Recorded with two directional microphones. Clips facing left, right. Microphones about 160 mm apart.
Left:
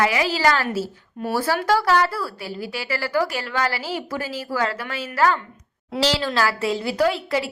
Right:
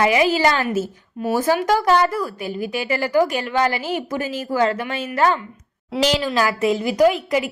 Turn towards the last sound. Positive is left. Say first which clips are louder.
# right 4 dB
turn(degrees=-15)  # may be behind; listen again after turning